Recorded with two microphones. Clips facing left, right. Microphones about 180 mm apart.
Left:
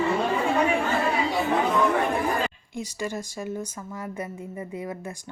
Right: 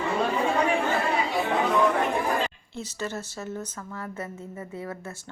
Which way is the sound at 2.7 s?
10° left (ahead or behind).